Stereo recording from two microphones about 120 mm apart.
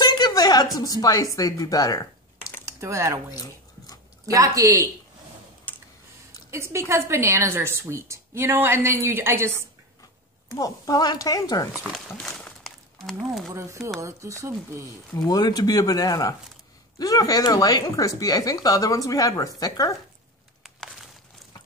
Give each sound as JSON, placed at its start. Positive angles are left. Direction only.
{"t": 0.0, "sound": "a sound", "side_deg": 35}
{"t": 1.0, "sound": "speech", "side_deg": 30}
{"t": 2.6, "sound": "speech", "side_deg": -25}
{"t": 3.3, "sound": "chewing", "side_deg": 30}
{"t": 4.3, "sound": "a woman's voice", "side_deg": -30}
{"t": 6.5, "sound": "a woman's voice", "side_deg": -25}
{"t": 10.6, "sound": "speech", "side_deg": 30}
{"t": 11.9, "sound": "a sound", "side_deg": 5}
{"t": 13.5, "sound": "a woman's voice", "side_deg": -25}
{"t": 15.2, "sound": "speech", "side_deg": 35}
{"t": 20.6, "sound": "crumpling", "side_deg": 0}